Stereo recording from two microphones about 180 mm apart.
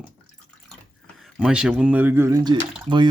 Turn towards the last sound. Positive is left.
turn(degrees=-25)  # may be behind; listen again after turning